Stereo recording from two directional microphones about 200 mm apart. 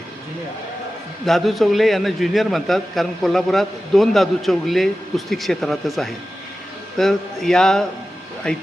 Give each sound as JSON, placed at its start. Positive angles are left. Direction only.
{"t": 1.2, "sound": "a man's voice", "side_deg": 0}